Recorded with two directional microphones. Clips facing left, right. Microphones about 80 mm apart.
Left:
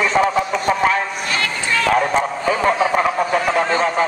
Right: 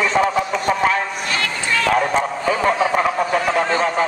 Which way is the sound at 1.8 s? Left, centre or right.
Left.